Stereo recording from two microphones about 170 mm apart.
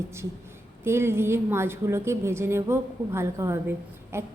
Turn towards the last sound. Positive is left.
turn(degrees=-15)  # may be behind; listen again after turning